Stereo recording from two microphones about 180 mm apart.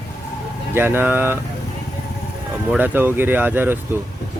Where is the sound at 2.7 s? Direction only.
10° right (ahead or behind).